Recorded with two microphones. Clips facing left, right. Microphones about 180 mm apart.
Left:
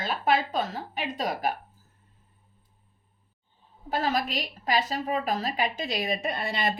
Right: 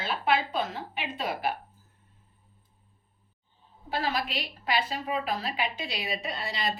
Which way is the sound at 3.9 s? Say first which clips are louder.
Left 3 dB; 45° left (ahead or behind).